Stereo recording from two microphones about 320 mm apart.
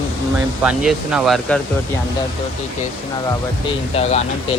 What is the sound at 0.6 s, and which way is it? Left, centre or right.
Speech, centre.